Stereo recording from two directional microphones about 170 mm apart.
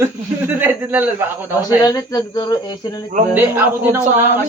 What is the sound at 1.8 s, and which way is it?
Speech, 25° left (ahead or behind).